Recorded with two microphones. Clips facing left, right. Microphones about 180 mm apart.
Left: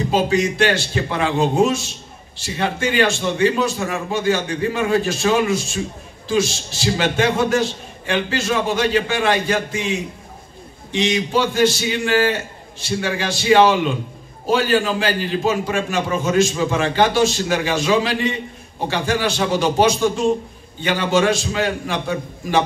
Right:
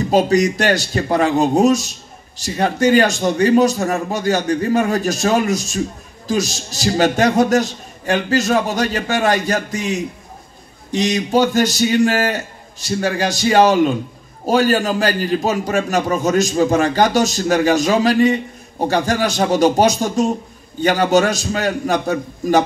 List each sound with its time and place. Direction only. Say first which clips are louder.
0.1 s a man's voice: right 5 dB; 40° right (ahead or behind)